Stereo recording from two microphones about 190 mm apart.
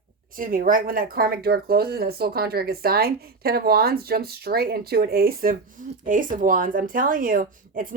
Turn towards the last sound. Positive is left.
turn(degrees=-45)  # may be behind; listen again after turning